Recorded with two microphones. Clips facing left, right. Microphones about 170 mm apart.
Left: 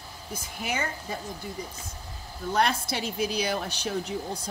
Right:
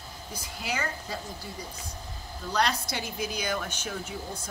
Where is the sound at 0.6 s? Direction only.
20° left (ahead or behind).